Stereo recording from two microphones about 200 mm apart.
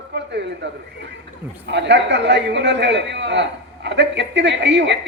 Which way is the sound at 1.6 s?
60° right (ahead or behind).